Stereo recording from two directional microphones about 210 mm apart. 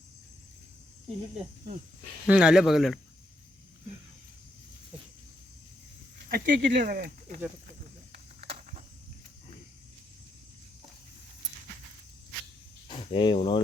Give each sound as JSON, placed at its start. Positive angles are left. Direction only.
{"t": 2.2, "sound": "speech", "side_deg": -5}
{"t": 6.2, "sound": "speech", "side_deg": -40}
{"t": 8.4, "sound": "a sound", "side_deg": -30}
{"t": 12.9, "sound": "speech", "side_deg": 25}